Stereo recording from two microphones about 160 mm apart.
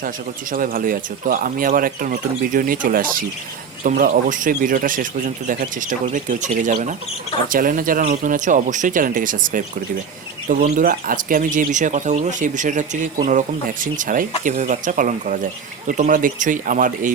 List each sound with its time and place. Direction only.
0.5 s speech: 60° right (ahead or behind)